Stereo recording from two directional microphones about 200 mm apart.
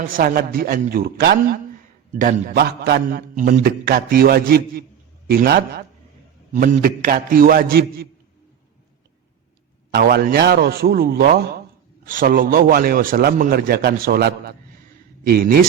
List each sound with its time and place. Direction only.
0.0 s a man's voice: 45° right (ahead or behind)
6.5 s a man's voice: 40° right (ahead or behind)
9.9 s a man's voice: 50° right (ahead or behind)